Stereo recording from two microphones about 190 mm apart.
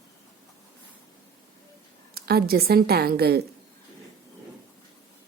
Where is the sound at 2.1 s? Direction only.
55° right (ahead or behind).